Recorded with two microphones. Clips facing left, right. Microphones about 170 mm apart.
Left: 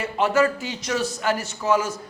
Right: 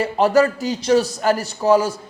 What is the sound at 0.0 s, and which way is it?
A man's voice, 35° right (ahead or behind).